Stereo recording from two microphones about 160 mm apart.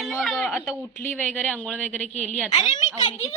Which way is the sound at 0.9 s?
10° left (ahead or behind).